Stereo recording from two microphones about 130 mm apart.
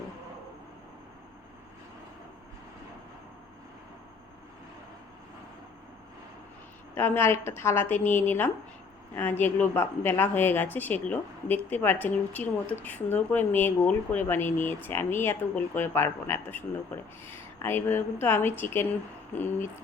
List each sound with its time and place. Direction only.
6.9 s a woman's voice: 20° left (ahead or behind)